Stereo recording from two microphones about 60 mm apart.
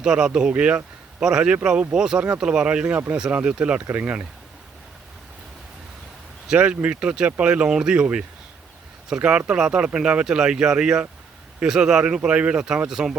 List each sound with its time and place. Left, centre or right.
0.0 s speech: centre
3.8 s speech: right
4.0 s speech: centre
6.5 s speech: centre